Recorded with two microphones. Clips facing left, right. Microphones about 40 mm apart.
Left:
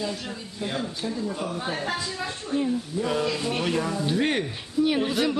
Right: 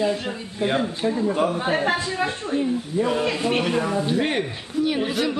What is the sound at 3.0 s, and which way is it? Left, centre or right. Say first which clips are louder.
Speech: right 4 dB; centre.